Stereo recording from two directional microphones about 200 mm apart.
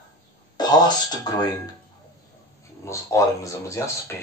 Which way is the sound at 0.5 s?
20° left (ahead or behind).